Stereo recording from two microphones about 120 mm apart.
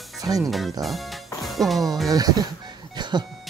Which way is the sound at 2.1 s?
35° right (ahead or behind).